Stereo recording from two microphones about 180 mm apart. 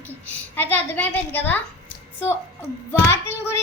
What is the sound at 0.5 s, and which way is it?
Child singing, 10° left (ahead or behind).